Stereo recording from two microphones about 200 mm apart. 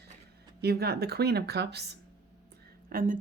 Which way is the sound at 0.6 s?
50° right (ahead or behind).